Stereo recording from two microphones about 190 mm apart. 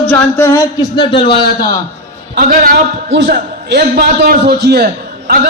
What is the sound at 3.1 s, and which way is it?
A man's voice, 65° right (ahead or behind).